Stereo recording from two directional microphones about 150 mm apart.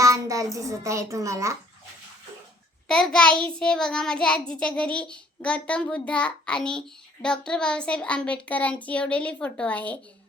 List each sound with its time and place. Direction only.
0.0 s a child's voice: 20° right (ahead or behind)
2.8 s a child's voice: 5° left (ahead or behind)
3.4 s child singing: 5° left (ahead or behind)